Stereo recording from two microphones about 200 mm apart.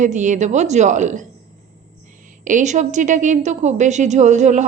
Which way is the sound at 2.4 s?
40° right (ahead or behind).